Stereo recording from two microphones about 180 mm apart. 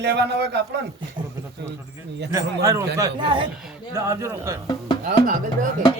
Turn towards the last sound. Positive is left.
turn(degrees=-50)  # may be behind; listen again after turning